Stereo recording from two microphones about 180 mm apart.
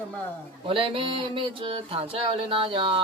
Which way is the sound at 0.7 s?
30° right (ahead or behind).